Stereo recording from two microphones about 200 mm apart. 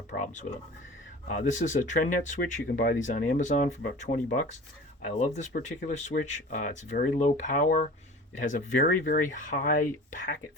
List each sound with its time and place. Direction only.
0.1 s speech: 45° left (ahead or behind)
1.3 s speech: 40° left (ahead or behind)